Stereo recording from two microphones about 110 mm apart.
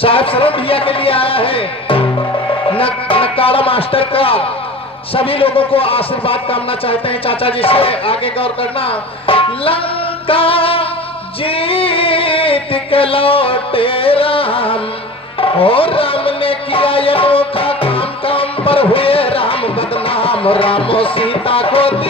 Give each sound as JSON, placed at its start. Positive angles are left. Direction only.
{"t": 0.0, "sound": "speech", "side_deg": 55}
{"t": 2.7, "sound": "music", "side_deg": 55}
{"t": 5.1, "sound": "a man's voice", "side_deg": 55}
{"t": 15.4, "sound": "music", "side_deg": 55}